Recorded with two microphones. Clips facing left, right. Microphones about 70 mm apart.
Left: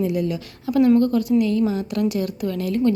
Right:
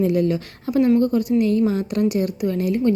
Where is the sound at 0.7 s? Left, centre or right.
Right.